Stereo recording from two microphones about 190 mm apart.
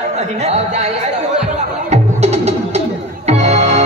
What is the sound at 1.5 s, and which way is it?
Music, 35° right (ahead or behind).